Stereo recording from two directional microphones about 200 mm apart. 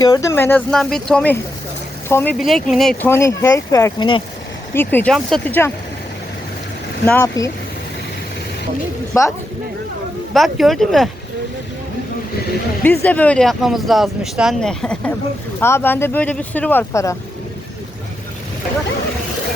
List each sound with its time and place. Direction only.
0.0 s speech: 15° left (ahead or behind)
2.4 s speech: centre (ahead or behind)
3.1 s speech: 15° left (ahead or behind)
4.7 s speech: 10° left (ahead or behind)
7.0 s speech: 10° left (ahead or behind)
9.1 s speech: 15° left (ahead or behind)
10.3 s speech: centre (ahead or behind)
12.8 s speech: 10° left (ahead or behind)